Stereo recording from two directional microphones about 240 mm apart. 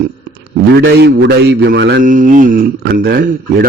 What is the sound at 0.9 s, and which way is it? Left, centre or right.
Speech, right.